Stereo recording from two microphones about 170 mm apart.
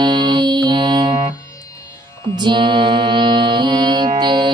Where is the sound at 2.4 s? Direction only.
30° right (ahead or behind).